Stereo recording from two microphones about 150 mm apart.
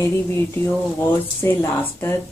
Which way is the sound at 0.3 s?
15° left (ahead or behind).